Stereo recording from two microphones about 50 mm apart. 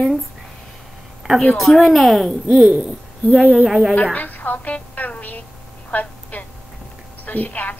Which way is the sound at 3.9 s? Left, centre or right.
Left.